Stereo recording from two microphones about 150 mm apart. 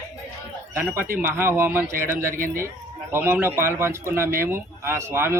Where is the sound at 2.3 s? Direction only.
65° right (ahead or behind).